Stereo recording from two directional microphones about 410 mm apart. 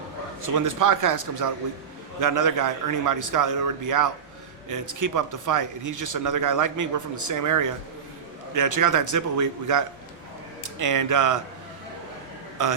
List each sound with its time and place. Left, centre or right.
0.4 s a man's voice: right
12.6 s a man's voice: right